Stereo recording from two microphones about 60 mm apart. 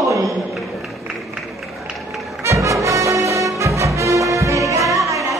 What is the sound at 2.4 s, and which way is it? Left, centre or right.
Music, right.